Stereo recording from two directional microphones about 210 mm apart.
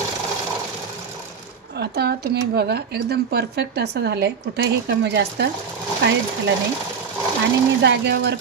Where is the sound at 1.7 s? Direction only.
50° right (ahead or behind).